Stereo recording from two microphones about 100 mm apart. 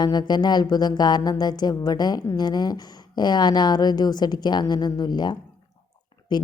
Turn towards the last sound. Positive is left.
turn(degrees=45)  # may be behind; listen again after turning